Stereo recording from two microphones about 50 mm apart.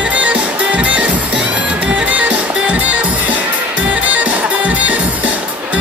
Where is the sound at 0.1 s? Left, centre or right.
Right.